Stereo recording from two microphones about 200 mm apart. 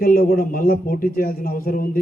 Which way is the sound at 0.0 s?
50° left (ahead or behind).